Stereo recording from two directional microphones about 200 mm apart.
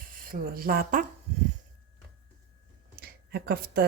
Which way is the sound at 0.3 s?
45° right (ahead or behind).